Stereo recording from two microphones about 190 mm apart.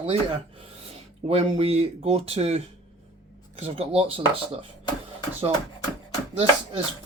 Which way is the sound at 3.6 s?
30° right (ahead or behind).